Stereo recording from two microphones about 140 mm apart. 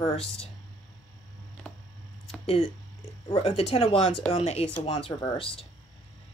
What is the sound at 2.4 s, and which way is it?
A woman's voice, 45° left (ahead or behind).